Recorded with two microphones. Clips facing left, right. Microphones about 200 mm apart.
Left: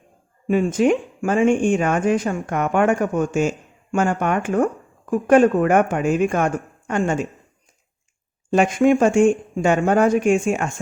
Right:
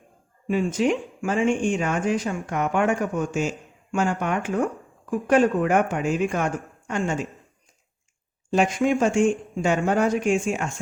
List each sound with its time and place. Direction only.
0.4 s speech: 50° left (ahead or behind)
8.4 s speech: 55° left (ahead or behind)